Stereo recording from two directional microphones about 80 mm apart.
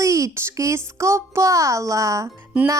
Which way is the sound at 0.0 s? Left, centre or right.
Right.